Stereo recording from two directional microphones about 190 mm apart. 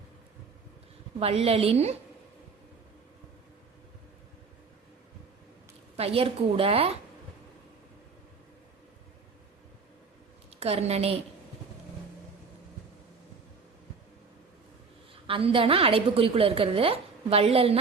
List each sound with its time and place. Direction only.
1.2 s a woman's voice: 30° right (ahead or behind)
6.0 s a woman's voice: 30° right (ahead or behind)
10.5 s a woman's voice: 35° right (ahead or behind)
15.3 s a woman's voice: 30° right (ahead or behind)